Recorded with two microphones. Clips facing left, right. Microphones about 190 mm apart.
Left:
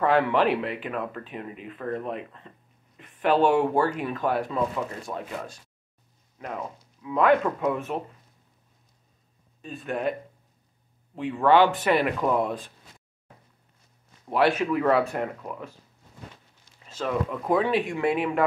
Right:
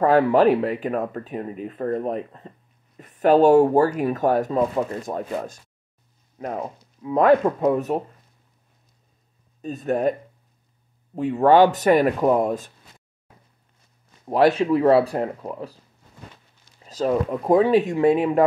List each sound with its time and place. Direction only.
0.0 s speech: 40° right (ahead or behind)
9.6 s speech: 40° right (ahead or behind)
11.1 s speech: 40° right (ahead or behind)
14.2 s speech: 35° right (ahead or behind)
16.8 s speech: 35° right (ahead or behind)